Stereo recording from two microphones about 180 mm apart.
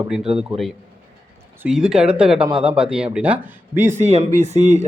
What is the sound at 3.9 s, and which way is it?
Speech, 40° right (ahead or behind).